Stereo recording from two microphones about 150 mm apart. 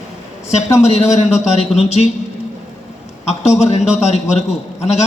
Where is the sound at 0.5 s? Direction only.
45° left (ahead or behind).